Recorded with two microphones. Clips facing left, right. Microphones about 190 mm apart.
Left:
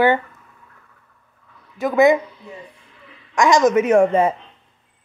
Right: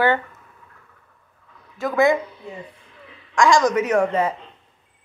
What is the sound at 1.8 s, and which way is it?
Speech, 20° left (ahead or behind).